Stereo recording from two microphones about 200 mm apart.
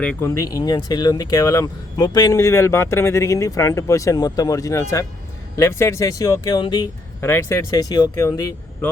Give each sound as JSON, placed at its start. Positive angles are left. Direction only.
{"t": 0.0, "sound": "speech", "side_deg": 10}